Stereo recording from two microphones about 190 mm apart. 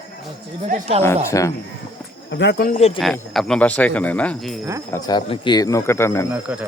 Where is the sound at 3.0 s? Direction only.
Centre (ahead or behind).